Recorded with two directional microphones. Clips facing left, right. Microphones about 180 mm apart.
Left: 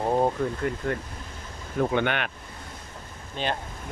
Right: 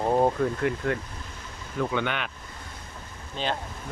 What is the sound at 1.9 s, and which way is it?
Speech, 55° left (ahead or behind).